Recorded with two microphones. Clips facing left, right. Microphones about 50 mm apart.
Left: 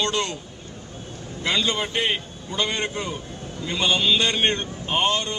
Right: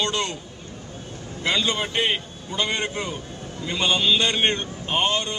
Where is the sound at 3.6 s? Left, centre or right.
Centre.